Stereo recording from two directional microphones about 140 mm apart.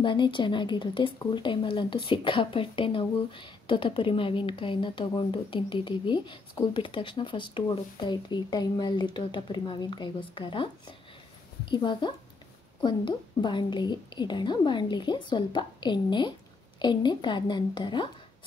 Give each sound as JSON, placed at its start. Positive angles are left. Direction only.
{"t": 0.0, "sound": "speech", "side_deg": 35}